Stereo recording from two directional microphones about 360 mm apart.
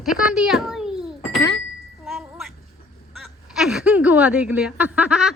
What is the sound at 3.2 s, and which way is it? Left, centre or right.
Speech, centre.